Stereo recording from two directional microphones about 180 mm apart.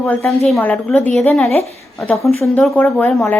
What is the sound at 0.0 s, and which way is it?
A woman's voice, 10° left (ahead or behind).